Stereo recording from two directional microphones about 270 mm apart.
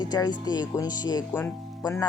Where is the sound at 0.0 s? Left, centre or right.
Centre.